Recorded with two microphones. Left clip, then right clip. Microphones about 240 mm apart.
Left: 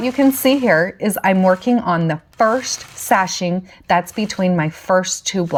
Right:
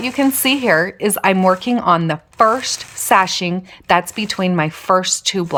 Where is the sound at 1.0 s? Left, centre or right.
Right.